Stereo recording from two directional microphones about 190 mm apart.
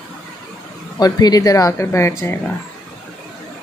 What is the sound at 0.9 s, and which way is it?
Speech, 20° left (ahead or behind).